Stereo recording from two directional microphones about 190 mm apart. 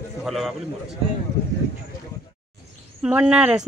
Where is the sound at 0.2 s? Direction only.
Centre (ahead or behind).